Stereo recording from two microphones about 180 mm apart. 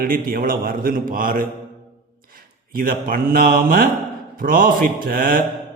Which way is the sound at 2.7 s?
50° right (ahead or behind).